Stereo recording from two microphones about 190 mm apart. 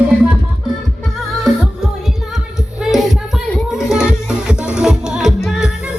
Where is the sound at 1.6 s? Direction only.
Centre (ahead or behind).